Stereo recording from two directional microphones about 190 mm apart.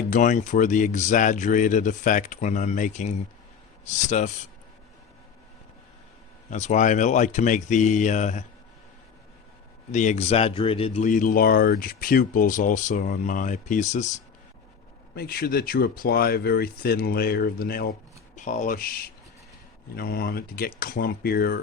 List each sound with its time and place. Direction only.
0.1 s speech: 40° left (ahead or behind)
6.5 s speech: 40° left (ahead or behind)
9.9 s speech: 40° left (ahead or behind)
11.1 s speech: 45° left (ahead or behind)
15.1 s speech: 55° left (ahead or behind)
18.3 s speech: 40° left (ahead or behind)